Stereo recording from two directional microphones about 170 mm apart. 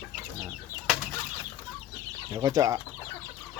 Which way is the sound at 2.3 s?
20° right (ahead or behind).